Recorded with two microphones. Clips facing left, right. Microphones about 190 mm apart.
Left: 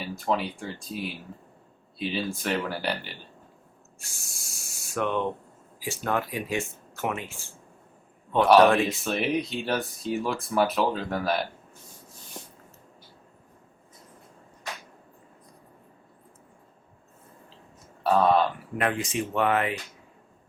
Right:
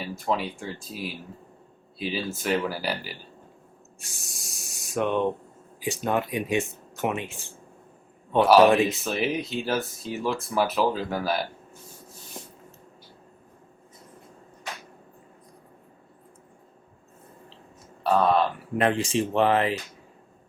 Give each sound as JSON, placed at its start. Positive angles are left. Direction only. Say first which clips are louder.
{"t": 0.0, "sound": "speech", "louder": "even", "side_deg": 0}
{"t": 4.0, "sound": "speech", "louder": "right 4 dB", "side_deg": -20}
{"t": 8.4, "sound": "speech", "louder": "right 1 dB", "side_deg": -5}
{"t": 12.4, "sound": "a sound", "louder": "right 1 dB", "side_deg": -5}
{"t": 18.0, "sound": "speech", "louder": "even", "side_deg": 0}
{"t": 18.8, "sound": "speech", "louder": "right 4 dB", "side_deg": -30}